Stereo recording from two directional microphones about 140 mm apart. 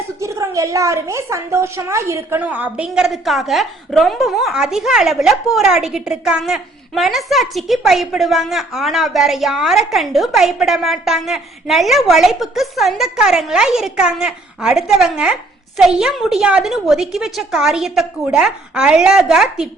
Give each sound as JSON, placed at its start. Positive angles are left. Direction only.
{"t": 0.2, "sound": "a woman's voice", "side_deg": -20}